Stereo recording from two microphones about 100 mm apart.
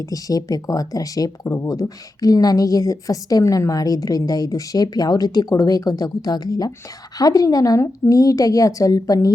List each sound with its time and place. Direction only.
0.0 s speech: 35° left (ahead or behind)